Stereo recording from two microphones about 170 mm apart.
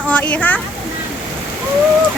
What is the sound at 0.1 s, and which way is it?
Speech, 10° left (ahead or behind).